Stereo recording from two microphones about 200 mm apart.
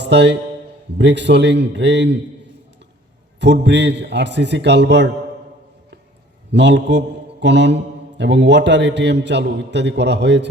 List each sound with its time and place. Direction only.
0.0 s a man's voice: 60° right (ahead or behind)
3.4 s a man's voice: 60° right (ahead or behind)
6.5 s a man's voice: 60° right (ahead or behind)